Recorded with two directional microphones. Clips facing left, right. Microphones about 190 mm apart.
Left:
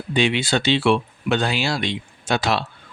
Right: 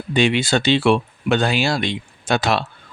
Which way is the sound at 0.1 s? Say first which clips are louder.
Right 3 dB; 45° right (ahead or behind).